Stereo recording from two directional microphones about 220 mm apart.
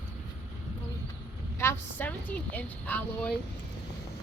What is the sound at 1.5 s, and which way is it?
A woman's voice, 10° left (ahead or behind).